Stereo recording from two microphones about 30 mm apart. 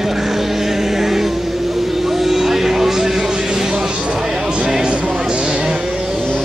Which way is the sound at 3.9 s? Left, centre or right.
Right.